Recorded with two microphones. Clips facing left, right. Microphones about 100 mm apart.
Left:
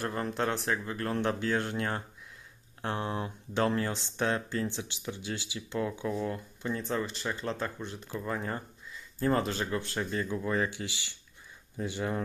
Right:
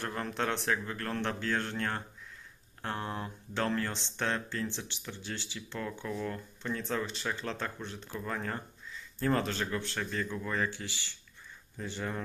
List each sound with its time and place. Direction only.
0.0 s speech: 15° left (ahead or behind)
0.3 s speech: 5° left (ahead or behind)